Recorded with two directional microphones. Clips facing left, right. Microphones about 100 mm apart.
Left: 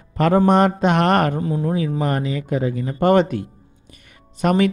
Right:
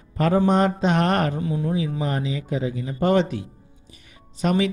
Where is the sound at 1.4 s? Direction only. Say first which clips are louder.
Left 3 dB; 40° left (ahead or behind).